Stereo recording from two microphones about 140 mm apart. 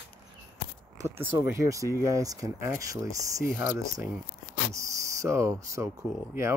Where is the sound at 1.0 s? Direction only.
15° right (ahead or behind).